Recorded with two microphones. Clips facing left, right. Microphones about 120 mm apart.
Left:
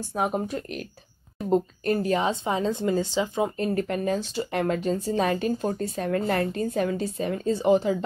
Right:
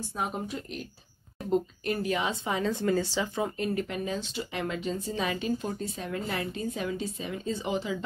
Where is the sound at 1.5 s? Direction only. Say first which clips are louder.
Left 5 dB; 40° left (ahead or behind); by 3.5 s 20° left (ahead or behind).